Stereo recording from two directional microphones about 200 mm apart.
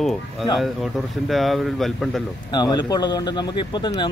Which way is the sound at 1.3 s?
Centre (ahead or behind).